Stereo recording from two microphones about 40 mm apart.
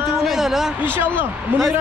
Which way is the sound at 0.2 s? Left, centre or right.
Centre.